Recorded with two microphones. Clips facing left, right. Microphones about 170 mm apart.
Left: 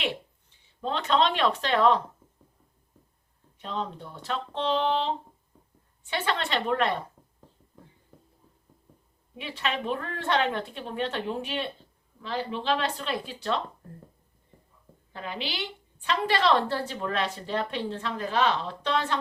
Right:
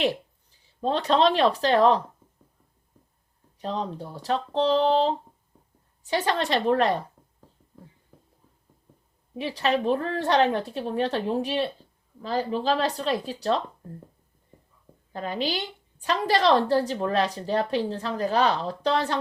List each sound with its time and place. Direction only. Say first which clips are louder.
0.0 s speech: right 7 dB; 40° right (ahead or behind)
3.6 s a woman's voice: right 3 dB; 35° right (ahead or behind)
8.1 s a sound: left 1 dB; centre (ahead or behind)
9.3 s a woman's voice: right 7 dB; 35° right (ahead or behind)
15.1 s a woman's voice: right 7 dB; 40° right (ahead or behind)